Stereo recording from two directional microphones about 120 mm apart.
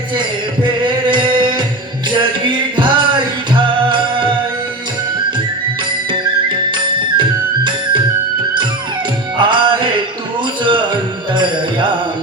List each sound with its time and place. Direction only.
0.2 s music: 40° right (ahead or behind)
6.1 s music: 40° right (ahead or behind)
9.4 s music: 40° right (ahead or behind)